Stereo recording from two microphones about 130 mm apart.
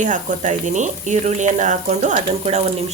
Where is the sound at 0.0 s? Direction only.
70° right (ahead or behind).